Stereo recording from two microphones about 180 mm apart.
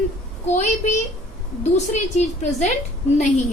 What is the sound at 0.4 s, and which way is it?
A woman's voice, 40° left (ahead or behind).